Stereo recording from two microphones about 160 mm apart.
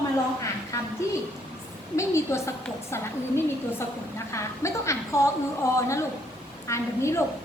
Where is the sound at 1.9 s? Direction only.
20° left (ahead or behind).